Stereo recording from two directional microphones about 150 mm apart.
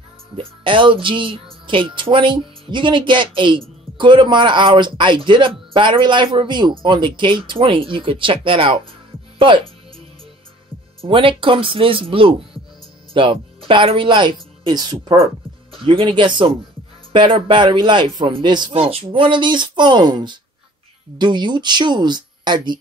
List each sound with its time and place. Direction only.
0.4 s speech: 35° right (ahead or behind)
11.1 s speech: 35° right (ahead or behind)